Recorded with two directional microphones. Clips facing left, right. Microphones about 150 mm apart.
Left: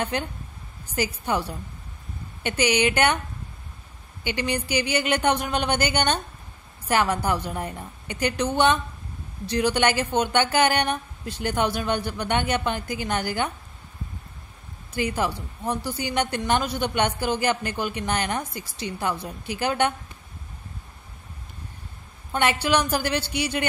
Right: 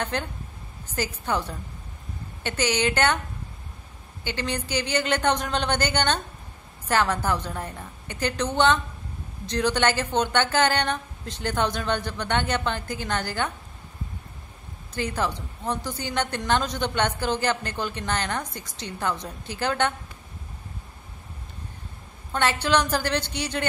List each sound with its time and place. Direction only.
0.1 s a woman's voice: 10° left (ahead or behind)
4.2 s a woman's voice: 15° left (ahead or behind)
15.0 s a woman's voice: 10° left (ahead or behind)
22.3 s a woman's voice: 15° left (ahead or behind)